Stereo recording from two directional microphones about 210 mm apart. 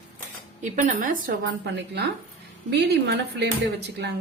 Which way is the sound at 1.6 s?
55° right (ahead or behind).